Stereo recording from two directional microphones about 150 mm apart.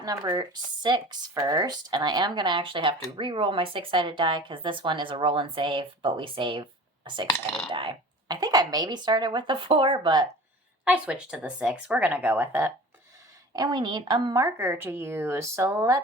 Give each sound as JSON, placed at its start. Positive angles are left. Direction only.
{"t": 0.0, "sound": "speech", "side_deg": -25}
{"t": 10.8, "sound": "speech", "side_deg": -10}
{"t": 13.5, "sound": "speech", "side_deg": -25}